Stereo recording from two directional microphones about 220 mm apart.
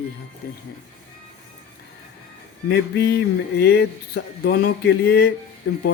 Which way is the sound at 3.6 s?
45° left (ahead or behind).